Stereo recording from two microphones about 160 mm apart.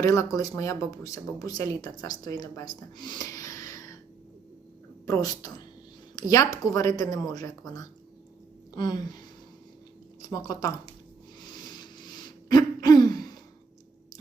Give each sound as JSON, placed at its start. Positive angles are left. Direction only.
{"t": 0.0, "sound": "speech", "side_deg": 20}
{"t": 5.0, "sound": "speech", "side_deg": 20}
{"t": 8.7, "sound": "a sound", "side_deg": 25}
{"t": 10.2, "sound": "speech", "side_deg": 25}
{"t": 11.3, "sound": "throat clearing", "side_deg": 25}